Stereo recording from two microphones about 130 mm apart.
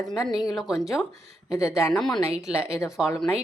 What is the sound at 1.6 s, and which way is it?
Speech, 20° left (ahead or behind).